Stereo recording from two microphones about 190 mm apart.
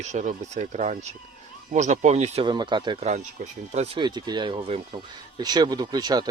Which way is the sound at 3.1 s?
40° right (ahead or behind).